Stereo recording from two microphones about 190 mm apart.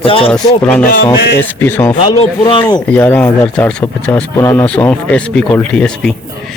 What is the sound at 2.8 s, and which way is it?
Speech, 10° left (ahead or behind).